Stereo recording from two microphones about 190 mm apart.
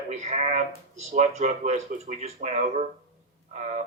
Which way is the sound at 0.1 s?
35° right (ahead or behind).